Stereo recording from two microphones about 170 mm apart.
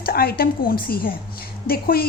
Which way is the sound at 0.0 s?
60° left (ahead or behind).